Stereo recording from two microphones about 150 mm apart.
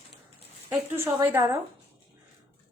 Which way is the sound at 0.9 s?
15° right (ahead or behind).